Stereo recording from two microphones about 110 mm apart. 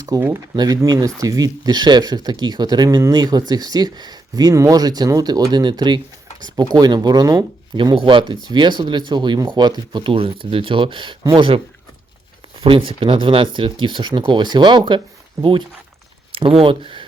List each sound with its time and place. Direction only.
0.1 s speech: 35° right (ahead or behind)
7.9 s speech: 50° right (ahead or behind)
12.6 s speech: 50° right (ahead or behind)